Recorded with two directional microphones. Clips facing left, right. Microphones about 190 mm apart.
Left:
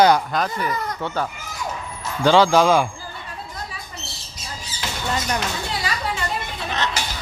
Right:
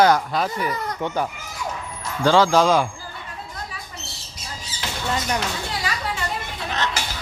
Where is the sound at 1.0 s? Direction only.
15° right (ahead or behind).